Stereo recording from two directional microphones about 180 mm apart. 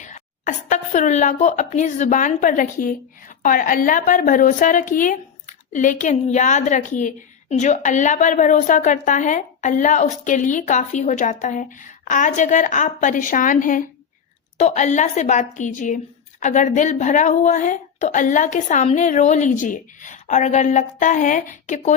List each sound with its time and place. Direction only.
0.0 s a woman's voice: 45° left (ahead or behind)